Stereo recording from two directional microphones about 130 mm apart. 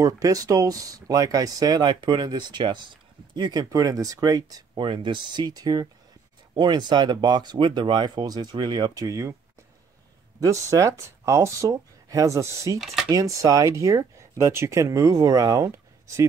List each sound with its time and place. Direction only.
0.0 s speech: 25° right (ahead or behind)
4.8 s speech: 40° right (ahead or behind); by 9.3 s 25° right (ahead or behind)
10.4 s speech: 25° right (ahead or behind)